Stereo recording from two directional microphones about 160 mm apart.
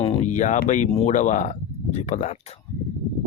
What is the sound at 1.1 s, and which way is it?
Speech, 50° left (ahead or behind).